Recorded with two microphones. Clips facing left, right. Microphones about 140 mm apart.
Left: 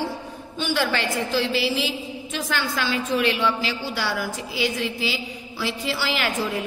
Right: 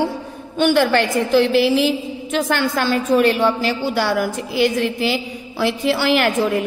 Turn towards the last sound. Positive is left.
turn(degrees=-55)  # may be behind; listen again after turning